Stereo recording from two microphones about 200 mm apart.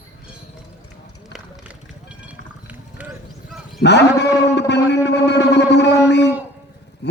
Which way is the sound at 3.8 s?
60° left (ahead or behind).